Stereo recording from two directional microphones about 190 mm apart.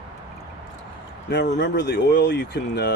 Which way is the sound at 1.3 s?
65° left (ahead or behind).